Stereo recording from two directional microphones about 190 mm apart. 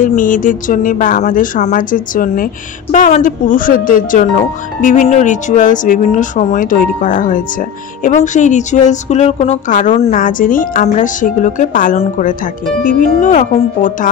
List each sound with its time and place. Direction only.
0.0 s speech: 45° left (ahead or behind)